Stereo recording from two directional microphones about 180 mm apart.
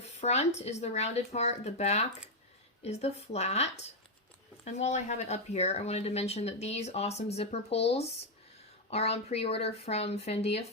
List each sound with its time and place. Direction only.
0.0 s speech: 35° left (ahead or behind)